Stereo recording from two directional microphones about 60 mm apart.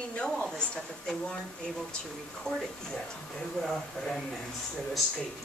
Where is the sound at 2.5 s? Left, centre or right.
Centre.